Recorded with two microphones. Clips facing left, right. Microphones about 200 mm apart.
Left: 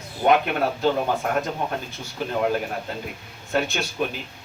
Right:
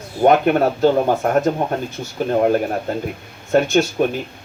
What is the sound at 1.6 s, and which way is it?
Speech, 50° right (ahead or behind).